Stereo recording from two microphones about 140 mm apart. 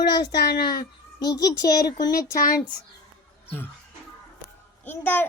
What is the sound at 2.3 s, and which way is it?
Speech, 90° left.